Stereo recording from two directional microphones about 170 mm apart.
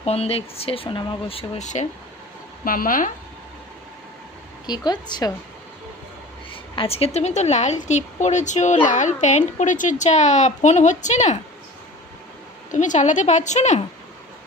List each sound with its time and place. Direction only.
0.0 s speech: 35° left (ahead or behind)
2.6 s speech: 55° left (ahead or behind)
4.6 s a woman's voice: 25° left (ahead or behind)
6.7 s a woman's voice: 35° left (ahead or behind)
12.7 s a woman's voice: 45° left (ahead or behind)